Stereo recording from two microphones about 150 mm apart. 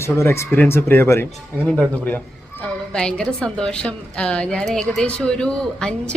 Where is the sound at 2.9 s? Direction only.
5° left (ahead or behind).